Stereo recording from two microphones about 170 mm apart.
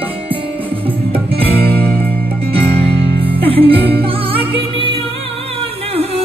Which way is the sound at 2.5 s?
35° right (ahead or behind).